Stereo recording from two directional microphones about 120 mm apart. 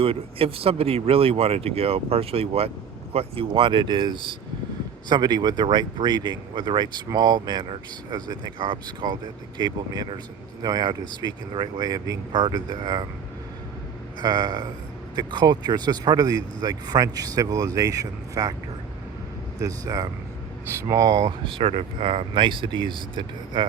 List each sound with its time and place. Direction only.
0.0 s speech: 50° right (ahead or behind); by 13.1 s 35° right (ahead or behind)
14.2 s speech: 35° right (ahead or behind)
19.5 s speech: 30° right (ahead or behind)
21.4 s speech: 50° right (ahead or behind)